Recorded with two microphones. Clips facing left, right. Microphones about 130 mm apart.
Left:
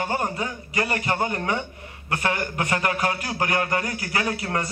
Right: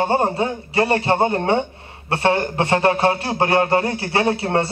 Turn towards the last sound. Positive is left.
turn(degrees=-30)  # may be behind; listen again after turning